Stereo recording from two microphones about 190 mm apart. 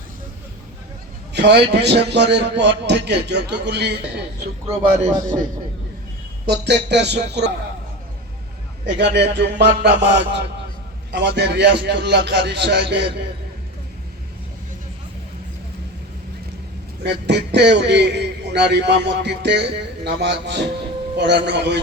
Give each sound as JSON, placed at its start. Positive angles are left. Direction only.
{"t": 1.3, "sound": "a sound", "side_deg": -60}
{"t": 1.7, "sound": "a man's voice", "side_deg": -60}
{"t": 4.8, "sound": "a man's voice", "side_deg": -25}
{"t": 6.4, "sound": "a man's voice", "side_deg": -60}
{"t": 9.0, "sound": "a man's voice", "side_deg": -65}
{"t": 17.0, "sound": "a man's voice", "side_deg": -65}